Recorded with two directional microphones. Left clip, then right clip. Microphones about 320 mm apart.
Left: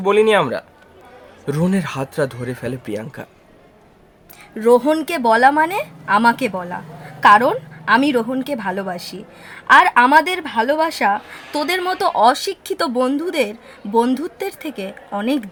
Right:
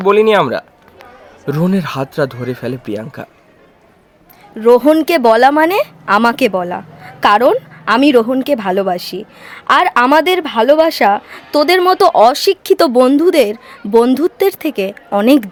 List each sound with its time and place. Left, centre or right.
0.0 s speech: centre
4.6 s speech: right